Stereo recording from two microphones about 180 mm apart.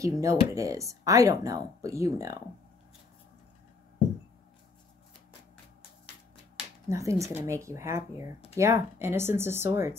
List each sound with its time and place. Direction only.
0.0 s speech: 15° right (ahead or behind)
6.9 s speech: 15° right (ahead or behind)